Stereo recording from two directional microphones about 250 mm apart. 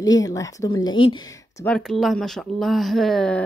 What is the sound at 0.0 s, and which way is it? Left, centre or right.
Speech, centre.